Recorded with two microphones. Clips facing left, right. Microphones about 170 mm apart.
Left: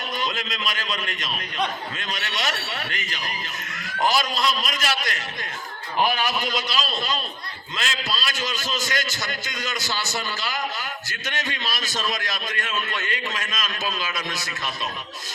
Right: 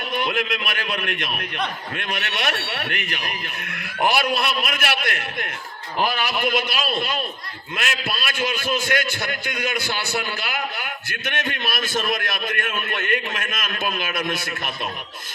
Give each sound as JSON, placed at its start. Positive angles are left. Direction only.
{"t": 0.2, "sound": "a man's voice", "side_deg": -60}